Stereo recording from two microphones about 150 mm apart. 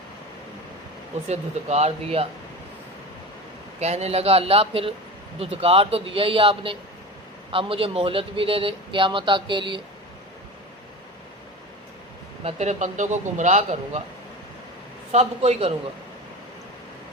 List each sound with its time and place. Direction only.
1.3 s a man's voice: 45° right (ahead or behind)
3.8 s a man's voice: 45° right (ahead or behind)
12.5 s a man's voice: 50° right (ahead or behind)
15.1 s a man's voice: 45° right (ahead or behind)